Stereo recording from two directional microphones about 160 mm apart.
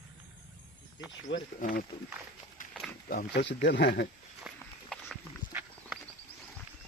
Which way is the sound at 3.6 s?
90° left.